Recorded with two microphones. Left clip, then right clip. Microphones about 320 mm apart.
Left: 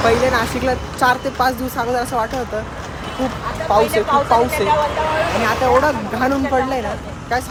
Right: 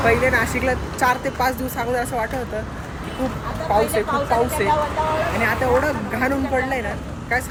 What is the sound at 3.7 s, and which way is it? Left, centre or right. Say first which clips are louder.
Speech: left 5 dB; left.